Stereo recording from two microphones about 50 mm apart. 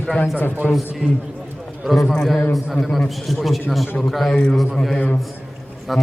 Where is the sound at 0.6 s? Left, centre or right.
Centre.